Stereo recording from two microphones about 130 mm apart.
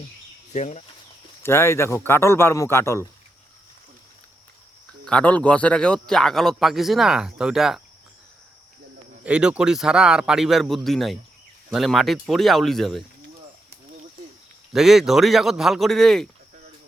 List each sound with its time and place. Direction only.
0.5 s speech: 60° left (ahead or behind)
1.4 s a man's voice: 20° left (ahead or behind)
5.0 s a man's voice: 10° left (ahead or behind)
9.2 s a man's voice: 10° right (ahead or behind)
14.7 s a man's voice: 5° right (ahead or behind)